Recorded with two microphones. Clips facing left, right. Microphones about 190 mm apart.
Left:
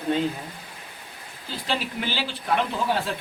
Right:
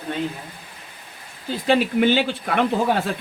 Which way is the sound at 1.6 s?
55° right (ahead or behind).